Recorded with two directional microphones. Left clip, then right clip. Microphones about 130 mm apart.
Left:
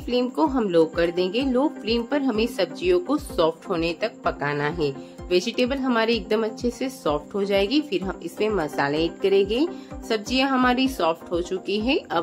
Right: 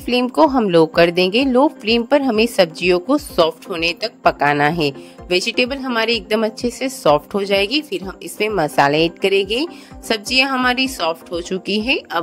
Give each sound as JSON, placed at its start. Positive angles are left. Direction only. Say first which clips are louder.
{"t": 0.0, "sound": "a woman's voice", "louder": "right 8 dB", "side_deg": -90}